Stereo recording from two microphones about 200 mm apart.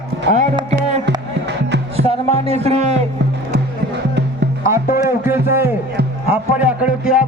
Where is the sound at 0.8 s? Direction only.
35° right (ahead or behind).